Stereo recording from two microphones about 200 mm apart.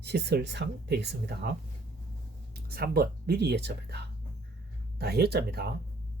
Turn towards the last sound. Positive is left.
turn(degrees=-55)  # may be behind; listen again after turning